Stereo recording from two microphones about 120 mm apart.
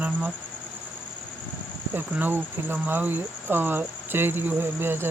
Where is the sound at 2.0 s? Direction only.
15° right (ahead or behind).